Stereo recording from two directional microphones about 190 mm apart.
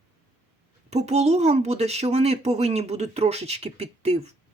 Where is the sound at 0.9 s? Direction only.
35° right (ahead or behind).